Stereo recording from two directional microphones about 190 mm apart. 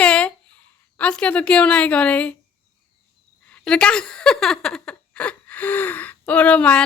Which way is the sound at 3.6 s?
5° left (ahead or behind).